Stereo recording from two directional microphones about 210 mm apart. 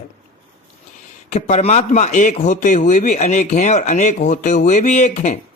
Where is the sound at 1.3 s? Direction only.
35° left (ahead or behind).